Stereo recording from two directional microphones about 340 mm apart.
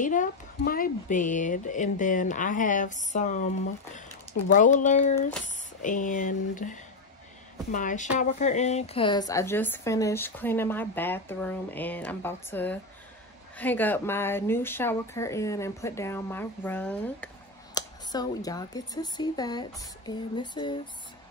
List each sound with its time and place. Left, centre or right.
0.0 s speech: left
4.5 s speech: left